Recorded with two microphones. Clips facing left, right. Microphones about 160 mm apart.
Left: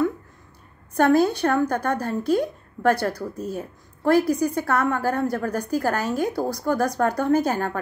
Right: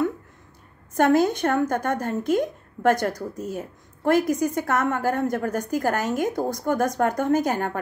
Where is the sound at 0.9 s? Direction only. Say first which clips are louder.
Left 1 dB; 20° right (ahead or behind).